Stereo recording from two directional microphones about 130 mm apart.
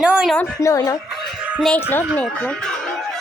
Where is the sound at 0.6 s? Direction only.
25° left (ahead or behind).